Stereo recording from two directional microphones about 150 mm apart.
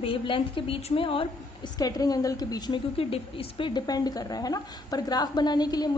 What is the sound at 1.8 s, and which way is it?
A woman's voice, 25° left (ahead or behind).